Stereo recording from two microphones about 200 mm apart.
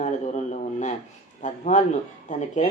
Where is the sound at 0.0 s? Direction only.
35° left (ahead or behind).